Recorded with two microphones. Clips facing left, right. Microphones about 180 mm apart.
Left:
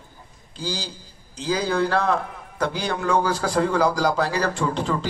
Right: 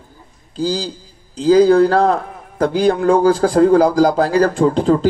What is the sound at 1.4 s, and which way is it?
A man's voice, 40° right (ahead or behind).